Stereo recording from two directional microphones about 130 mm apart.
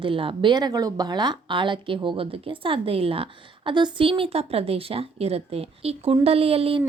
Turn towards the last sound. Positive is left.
turn(degrees=-45)  # may be behind; listen again after turning